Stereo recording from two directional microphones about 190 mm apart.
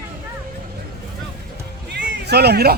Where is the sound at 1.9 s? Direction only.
60° right (ahead or behind).